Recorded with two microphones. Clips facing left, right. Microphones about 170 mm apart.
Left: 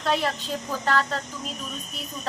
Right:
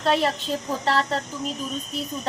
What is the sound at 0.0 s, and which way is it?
A woman's voice, 25° right (ahead or behind).